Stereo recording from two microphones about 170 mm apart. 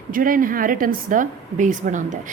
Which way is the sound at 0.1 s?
55° right (ahead or behind).